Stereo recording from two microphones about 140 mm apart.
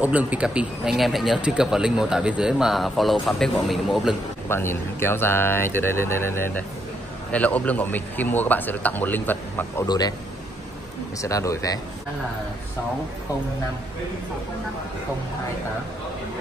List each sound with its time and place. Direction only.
0.0 s speech: 10° right (ahead or behind)
4.5 s a man's voice: 15° left (ahead or behind)
9.8 s speech: 30° left (ahead or behind)
11.1 s speech: 25° left (ahead or behind)